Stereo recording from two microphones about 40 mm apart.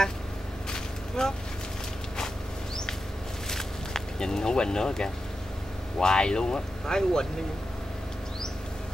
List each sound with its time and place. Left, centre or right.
0.7 s vehicle: centre
3.4 s a sound: centre
5.9 s speech: left